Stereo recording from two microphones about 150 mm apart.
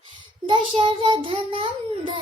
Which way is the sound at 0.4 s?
35° right (ahead or behind).